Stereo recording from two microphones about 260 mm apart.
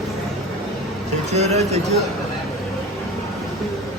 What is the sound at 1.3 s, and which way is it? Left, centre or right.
Speech, right.